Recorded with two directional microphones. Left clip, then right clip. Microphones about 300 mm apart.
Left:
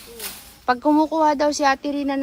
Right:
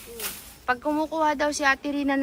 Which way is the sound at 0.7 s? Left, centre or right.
Centre.